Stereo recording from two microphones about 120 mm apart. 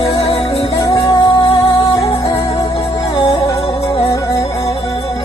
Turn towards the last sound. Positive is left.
turn(degrees=25)  # may be behind; listen again after turning